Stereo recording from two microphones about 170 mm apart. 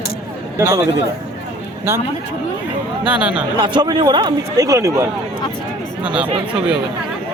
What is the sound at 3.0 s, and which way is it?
Speech, 5° right (ahead or behind).